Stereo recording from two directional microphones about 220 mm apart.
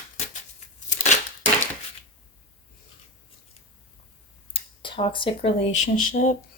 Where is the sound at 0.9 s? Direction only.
35° left (ahead or behind).